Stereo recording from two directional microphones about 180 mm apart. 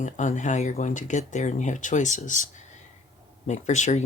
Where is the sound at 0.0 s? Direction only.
45° left (ahead or behind).